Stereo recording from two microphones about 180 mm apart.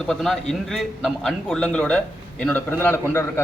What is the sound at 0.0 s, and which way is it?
A man's voice, centre (ahead or behind).